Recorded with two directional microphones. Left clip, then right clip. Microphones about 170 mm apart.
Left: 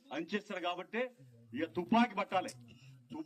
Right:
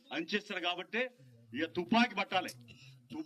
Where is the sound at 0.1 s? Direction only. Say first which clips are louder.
Right 3 dB; centre (ahead or behind).